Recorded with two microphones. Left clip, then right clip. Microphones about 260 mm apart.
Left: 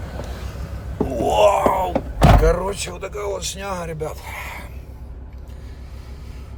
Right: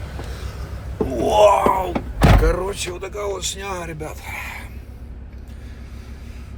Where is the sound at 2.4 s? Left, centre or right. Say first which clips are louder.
Left 2 dB; centre.